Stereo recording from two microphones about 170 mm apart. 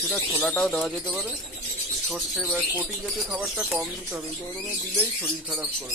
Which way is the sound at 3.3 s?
5° right (ahead or behind).